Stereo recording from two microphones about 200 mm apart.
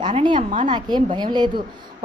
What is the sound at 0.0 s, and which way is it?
A woman's voice, 25° right (ahead or behind).